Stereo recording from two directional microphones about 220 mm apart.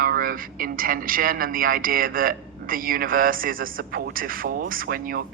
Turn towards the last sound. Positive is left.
turn(degrees=-40)  # may be behind; listen again after turning